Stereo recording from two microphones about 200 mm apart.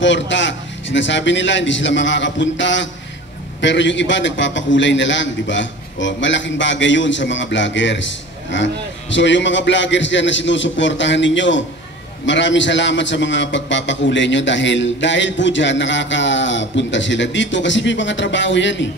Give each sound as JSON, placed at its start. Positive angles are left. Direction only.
{"t": 0.0, "sound": "a man's voice", "side_deg": 65}